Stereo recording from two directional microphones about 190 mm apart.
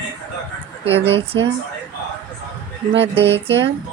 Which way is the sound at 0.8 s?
30° right (ahead or behind).